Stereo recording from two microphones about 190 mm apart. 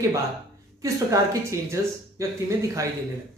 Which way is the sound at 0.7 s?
15° right (ahead or behind).